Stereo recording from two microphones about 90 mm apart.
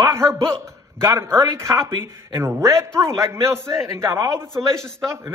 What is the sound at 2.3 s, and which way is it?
A man's voice, 35° right (ahead or behind).